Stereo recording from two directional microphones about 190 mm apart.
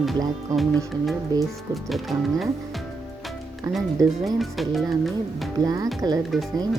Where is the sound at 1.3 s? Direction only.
20° right (ahead or behind).